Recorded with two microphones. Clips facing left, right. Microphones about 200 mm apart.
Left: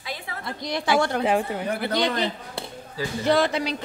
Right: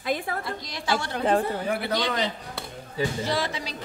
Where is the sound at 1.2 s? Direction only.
10° left (ahead or behind).